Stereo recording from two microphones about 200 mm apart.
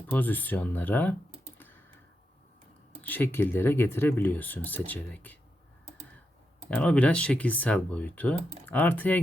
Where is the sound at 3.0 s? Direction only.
10° left (ahead or behind).